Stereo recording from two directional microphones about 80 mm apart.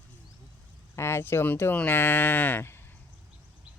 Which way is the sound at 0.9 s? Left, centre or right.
Left.